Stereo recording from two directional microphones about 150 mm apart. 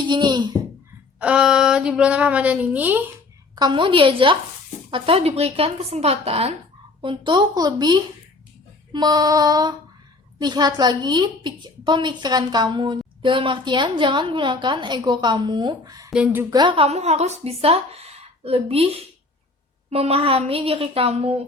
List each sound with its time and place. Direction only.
0.0 s a child's voice: 30° right (ahead or behind)
1.2 s speech: 5° right (ahead or behind)
3.5 s a woman's voice: 30° right (ahead or behind)
7.0 s a woman's voice: 30° right (ahead or behind)
16.0 s a woman's voice: 5° right (ahead or behind)
16.5 s a woman's voice: 30° right (ahead or behind)